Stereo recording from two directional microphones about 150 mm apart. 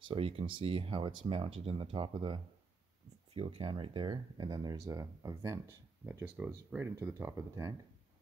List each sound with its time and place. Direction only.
0.1 s speech: 40° right (ahead or behind); by 7.7 s 20° right (ahead or behind)